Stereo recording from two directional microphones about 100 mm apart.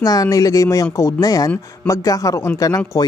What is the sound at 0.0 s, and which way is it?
Speech, 40° left (ahead or behind).